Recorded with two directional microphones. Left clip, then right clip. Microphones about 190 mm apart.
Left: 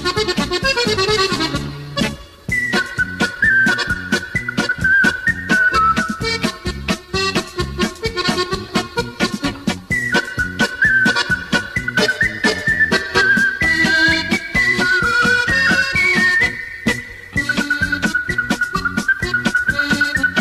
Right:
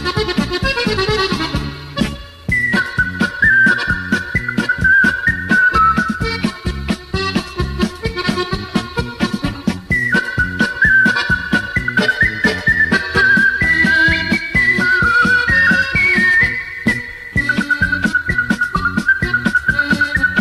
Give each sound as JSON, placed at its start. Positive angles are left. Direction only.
{"t": 0.0, "sound": "accordion", "side_deg": -30}
{"t": 2.7, "sound": "music", "side_deg": -30}